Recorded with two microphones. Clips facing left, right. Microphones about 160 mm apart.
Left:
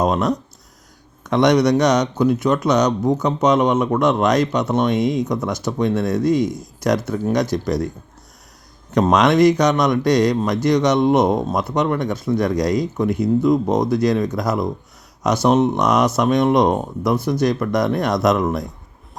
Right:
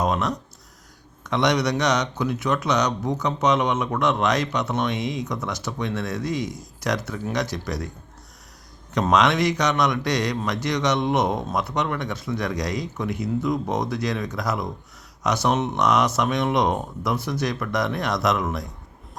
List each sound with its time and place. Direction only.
0.0 s speech: 40° left (ahead or behind)
9.0 s speech: 45° left (ahead or behind)